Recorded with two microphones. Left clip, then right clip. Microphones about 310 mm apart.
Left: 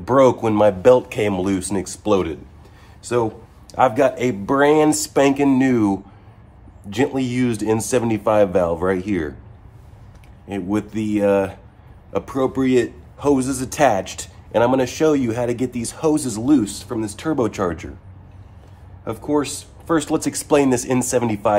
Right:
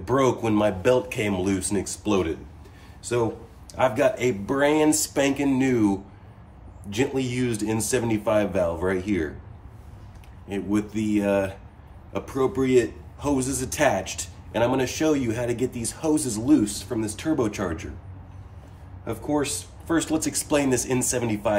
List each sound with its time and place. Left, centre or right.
0.0 s a man's voice: left
10.5 s a man's voice: left
19.0 s a man's voice: centre